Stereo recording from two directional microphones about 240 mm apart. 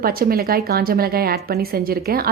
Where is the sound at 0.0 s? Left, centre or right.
Right.